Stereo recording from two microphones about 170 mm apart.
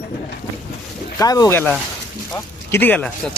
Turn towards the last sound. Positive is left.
turn(degrees=10)  # may be behind; listen again after turning